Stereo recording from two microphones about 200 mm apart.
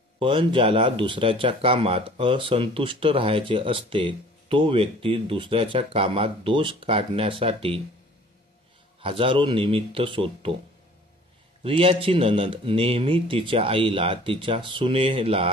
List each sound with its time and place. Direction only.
0.2 s speech: 25° right (ahead or behind)
9.0 s speech: 25° right (ahead or behind)
11.6 s speech: 25° right (ahead or behind)